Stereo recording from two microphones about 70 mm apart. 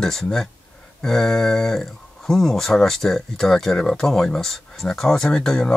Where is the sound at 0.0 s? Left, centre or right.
Centre.